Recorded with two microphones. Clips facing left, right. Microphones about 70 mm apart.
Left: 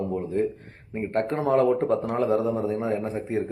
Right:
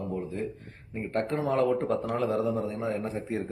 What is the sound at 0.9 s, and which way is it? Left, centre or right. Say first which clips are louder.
Speech: left 4 dB; left.